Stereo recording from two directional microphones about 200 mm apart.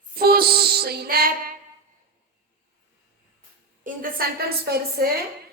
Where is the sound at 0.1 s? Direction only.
50° right (ahead or behind).